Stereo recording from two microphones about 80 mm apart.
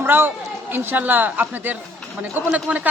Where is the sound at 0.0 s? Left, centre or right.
Right.